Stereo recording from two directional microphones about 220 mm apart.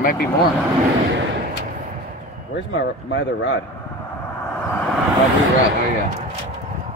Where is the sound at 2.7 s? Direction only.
55° left (ahead or behind).